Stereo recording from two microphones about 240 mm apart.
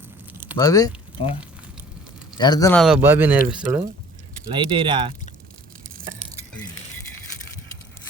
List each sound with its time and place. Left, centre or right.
0.5 s speech: centre
2.4 s speech: centre
2.7 s speech: centre
4.5 s speech: right